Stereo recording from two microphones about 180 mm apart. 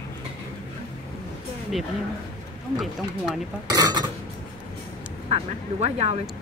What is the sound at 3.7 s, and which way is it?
Speech, 25° right (ahead or behind).